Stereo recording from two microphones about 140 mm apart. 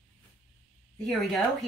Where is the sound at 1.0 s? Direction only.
Centre (ahead or behind).